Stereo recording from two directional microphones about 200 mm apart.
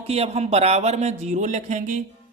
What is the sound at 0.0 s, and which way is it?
Speech, 30° right (ahead or behind).